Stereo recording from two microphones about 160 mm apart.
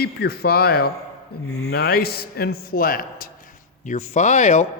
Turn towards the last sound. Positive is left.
turn(degrees=50)  # may be behind; listen again after turning